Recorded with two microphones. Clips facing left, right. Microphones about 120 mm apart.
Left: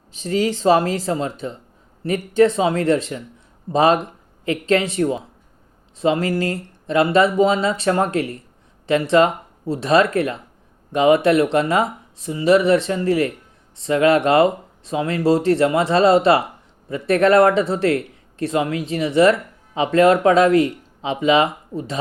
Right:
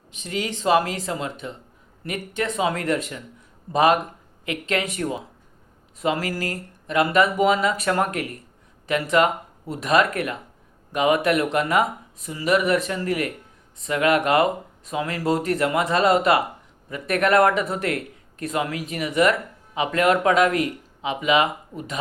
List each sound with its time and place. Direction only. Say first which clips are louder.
0.1 s speech: left 8 dB; 35° left (ahead or behind)